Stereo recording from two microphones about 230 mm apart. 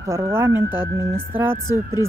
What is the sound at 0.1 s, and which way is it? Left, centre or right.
Speech, centre.